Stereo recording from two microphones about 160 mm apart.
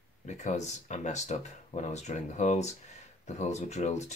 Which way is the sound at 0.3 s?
45° left (ahead or behind).